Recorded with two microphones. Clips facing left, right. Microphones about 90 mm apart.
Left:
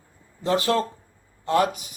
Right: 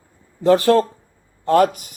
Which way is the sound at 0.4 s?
50° right (ahead or behind).